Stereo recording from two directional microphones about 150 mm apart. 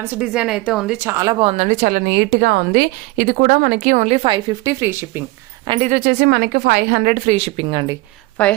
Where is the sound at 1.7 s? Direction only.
70° right (ahead or behind); by 5.2 s 15° right (ahead or behind).